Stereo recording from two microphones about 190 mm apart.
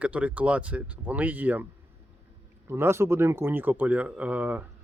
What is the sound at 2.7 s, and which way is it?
Speech, 15° right (ahead or behind).